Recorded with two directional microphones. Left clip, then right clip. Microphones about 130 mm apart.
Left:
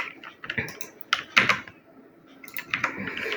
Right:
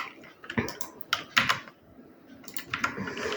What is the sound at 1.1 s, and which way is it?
Typing, 30° left (ahead or behind).